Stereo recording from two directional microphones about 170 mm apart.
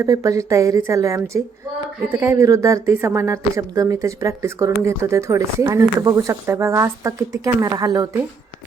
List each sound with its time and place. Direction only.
0.0 s a woman's voice: 20° right (ahead or behind)